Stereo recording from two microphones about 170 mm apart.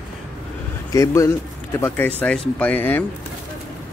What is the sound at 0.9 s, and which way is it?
Speech, 20° left (ahead or behind).